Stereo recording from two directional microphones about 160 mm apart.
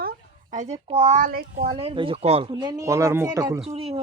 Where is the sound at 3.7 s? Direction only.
40° right (ahead or behind).